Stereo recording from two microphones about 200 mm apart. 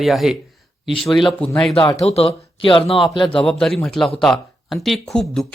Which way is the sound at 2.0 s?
30° left (ahead or behind).